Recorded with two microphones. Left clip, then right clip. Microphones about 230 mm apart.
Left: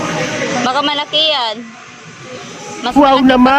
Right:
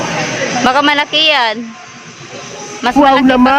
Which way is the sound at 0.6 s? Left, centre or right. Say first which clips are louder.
Right 6 dB; right.